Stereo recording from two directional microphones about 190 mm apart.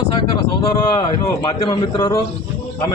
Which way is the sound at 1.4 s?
20° left (ahead or behind).